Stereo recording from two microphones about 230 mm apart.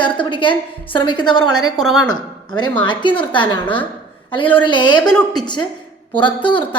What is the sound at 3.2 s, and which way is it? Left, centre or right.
A woman's voice, centre.